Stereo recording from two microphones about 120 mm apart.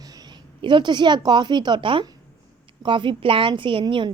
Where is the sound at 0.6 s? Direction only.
40° right (ahead or behind).